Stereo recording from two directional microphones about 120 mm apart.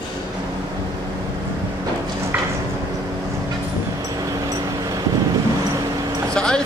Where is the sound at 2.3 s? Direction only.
15° right (ahead or behind).